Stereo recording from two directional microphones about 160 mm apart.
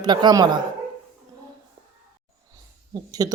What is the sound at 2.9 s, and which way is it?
Speech, 25° right (ahead or behind).